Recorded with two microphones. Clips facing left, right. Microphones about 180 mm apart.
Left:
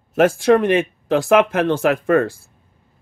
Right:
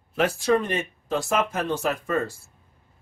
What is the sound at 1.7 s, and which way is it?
Speech, 65° left (ahead or behind).